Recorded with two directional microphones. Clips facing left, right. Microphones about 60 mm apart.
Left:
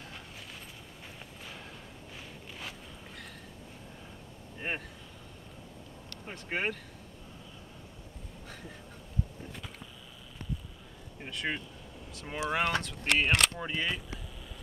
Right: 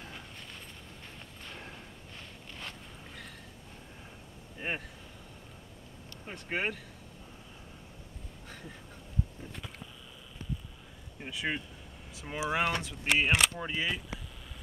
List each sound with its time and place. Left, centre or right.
4.6 s speech: centre
6.2 s speech: centre
11.1 s speech: centre